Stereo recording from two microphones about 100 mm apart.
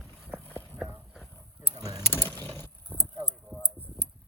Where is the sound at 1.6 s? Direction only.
35° right (ahead or behind).